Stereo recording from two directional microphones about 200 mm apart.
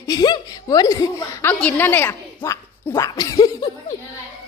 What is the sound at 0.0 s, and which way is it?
A woman's voice, 20° left (ahead or behind).